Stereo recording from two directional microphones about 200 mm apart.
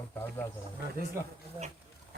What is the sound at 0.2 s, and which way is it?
Speech, 10° left (ahead or behind).